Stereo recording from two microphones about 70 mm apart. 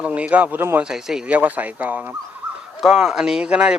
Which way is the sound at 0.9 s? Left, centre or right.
Centre.